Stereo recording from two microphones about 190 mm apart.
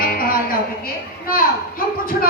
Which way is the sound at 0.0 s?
50° left (ahead or behind).